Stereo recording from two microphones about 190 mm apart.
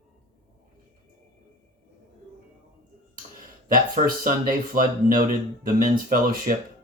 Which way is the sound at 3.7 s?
45° right (ahead or behind).